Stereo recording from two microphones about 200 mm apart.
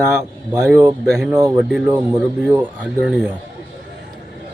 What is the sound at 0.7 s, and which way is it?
Speech, 10° right (ahead or behind).